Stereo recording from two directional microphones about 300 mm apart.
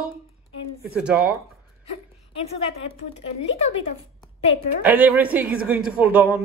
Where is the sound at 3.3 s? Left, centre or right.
Left.